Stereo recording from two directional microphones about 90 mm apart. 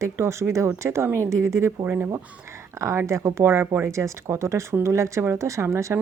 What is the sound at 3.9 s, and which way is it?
Speech, 35° right (ahead or behind).